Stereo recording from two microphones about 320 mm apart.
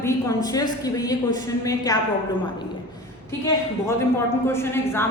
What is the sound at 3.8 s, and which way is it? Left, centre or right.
Speech, centre.